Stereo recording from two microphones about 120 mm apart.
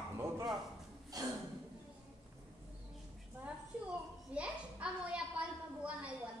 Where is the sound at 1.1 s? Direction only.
30° right (ahead or behind).